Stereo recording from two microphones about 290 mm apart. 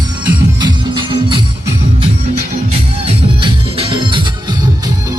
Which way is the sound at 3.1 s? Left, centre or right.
Centre.